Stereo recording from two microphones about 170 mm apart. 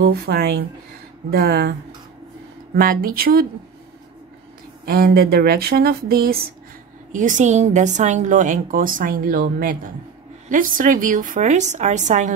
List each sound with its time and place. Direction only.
0.0 s speech: 65° right (ahead or behind)
2.7 s speech: 60° right (ahead or behind)
4.8 s speech: 60° right (ahead or behind)
7.1 s a woman's voice: 50° right (ahead or behind)